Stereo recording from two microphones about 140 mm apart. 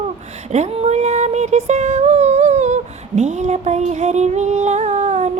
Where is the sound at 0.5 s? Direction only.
50° right (ahead or behind).